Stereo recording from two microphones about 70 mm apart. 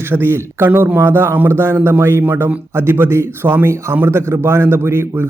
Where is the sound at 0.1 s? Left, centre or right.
Right.